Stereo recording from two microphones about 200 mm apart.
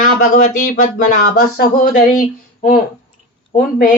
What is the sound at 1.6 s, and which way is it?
Speech, 45° left (ahead or behind).